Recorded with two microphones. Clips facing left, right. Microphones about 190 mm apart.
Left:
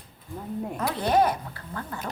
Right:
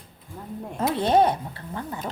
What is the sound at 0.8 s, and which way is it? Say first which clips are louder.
Speech: right 3 dB; 25° right (ahead or behind).